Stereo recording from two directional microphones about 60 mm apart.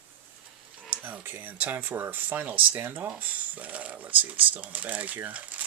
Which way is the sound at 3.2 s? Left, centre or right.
Right.